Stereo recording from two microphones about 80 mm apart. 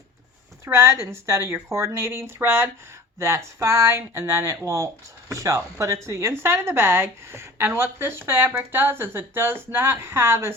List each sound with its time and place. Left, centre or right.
0.6 s a woman's voice: right